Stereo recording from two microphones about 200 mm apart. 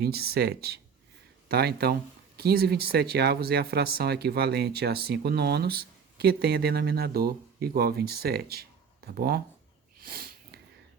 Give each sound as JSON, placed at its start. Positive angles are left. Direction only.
{"t": 0.0, "sound": "speech", "side_deg": -50}
{"t": 10.0, "sound": "wheeze", "side_deg": -50}